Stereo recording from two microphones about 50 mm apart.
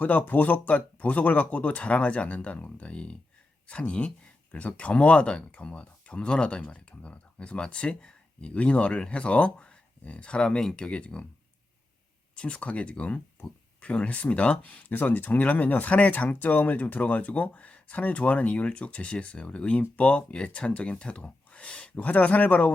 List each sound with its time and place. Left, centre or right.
0.0 s speech: left
12.4 s speech: left